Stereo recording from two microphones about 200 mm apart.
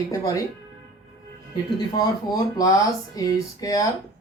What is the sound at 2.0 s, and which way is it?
Speech, 20° left (ahead or behind).